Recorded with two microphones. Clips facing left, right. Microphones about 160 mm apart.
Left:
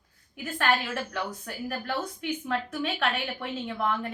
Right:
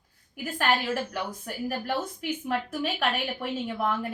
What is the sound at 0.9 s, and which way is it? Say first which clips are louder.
A woman's voice: right 1 dB; 15° right (ahead or behind).